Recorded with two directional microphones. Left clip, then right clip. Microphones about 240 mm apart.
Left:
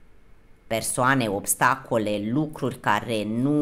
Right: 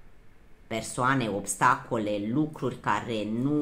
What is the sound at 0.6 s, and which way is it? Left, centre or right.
A woman's voice, left.